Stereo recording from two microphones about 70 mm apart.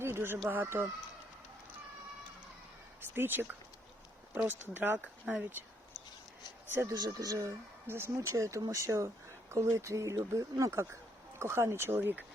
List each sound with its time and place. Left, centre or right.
0.0 s chicken: right
0.4 s speech: right
3.2 s speech: right
5.2 s speech: centre
6.8 s speech: right
7.9 s speech: right
8.3 s speech: right